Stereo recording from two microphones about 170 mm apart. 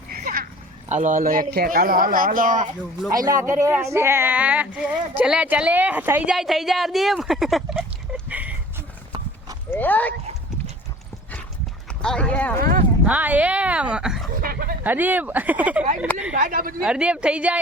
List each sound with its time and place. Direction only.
0.1 s a sound: 60° right (ahead or behind)
0.9 s a man's voice: 45° right (ahead or behind)
3.2 s speech: 20° right (ahead or behind)
9.6 s speech: 10° left (ahead or behind)
11.9 s speech: 5° left (ahead or behind)
12.5 s a man's voice: 55° right (ahead or behind)
13.1 s a woman's voice: 10° right (ahead or behind)
14.4 s dog: 60° right (ahead or behind)
14.8 s speech: 10° right (ahead or behind)
16.3 s speech: 55° right (ahead or behind)
16.8 s speech: 5° right (ahead or behind)